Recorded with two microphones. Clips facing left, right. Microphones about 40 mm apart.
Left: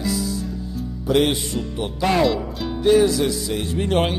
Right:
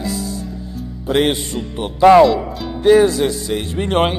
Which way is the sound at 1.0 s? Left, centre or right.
Right.